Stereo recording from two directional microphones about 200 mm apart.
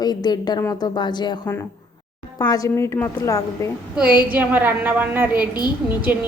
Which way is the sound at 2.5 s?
15° left (ahead or behind).